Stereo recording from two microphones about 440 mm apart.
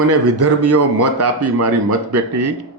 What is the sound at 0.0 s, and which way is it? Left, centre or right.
Speech, right.